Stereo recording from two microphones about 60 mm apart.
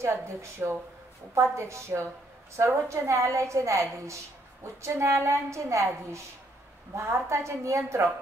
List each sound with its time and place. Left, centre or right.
0.0 s a woman's voice: right